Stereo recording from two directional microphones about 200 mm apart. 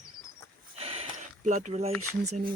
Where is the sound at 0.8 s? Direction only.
30° right (ahead or behind).